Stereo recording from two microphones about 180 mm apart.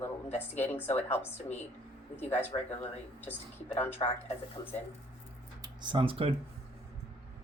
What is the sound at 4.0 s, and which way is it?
Speech, 35° left (ahead or behind).